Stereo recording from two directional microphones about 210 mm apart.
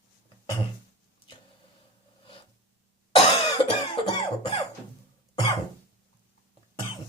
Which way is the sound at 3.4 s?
25° left (ahead or behind).